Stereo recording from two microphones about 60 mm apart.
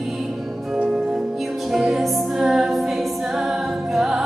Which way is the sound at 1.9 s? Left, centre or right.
Centre.